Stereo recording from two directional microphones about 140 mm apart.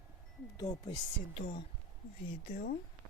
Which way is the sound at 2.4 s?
65° left (ahead or behind).